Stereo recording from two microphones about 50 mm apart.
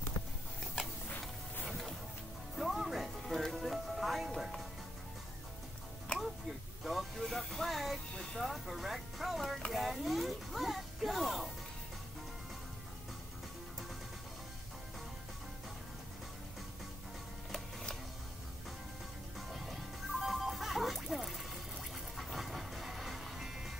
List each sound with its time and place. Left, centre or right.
1.7 s music: centre
6.8 s a sound: centre
7.7 s music: centre
8.1 s music: centre
8.4 s music: centre
9.7 s a sound: centre
17.5 s printer: centre
19.3 s music: centre